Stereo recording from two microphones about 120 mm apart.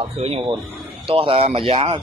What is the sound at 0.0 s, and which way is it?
Speech, 60° right (ahead or behind).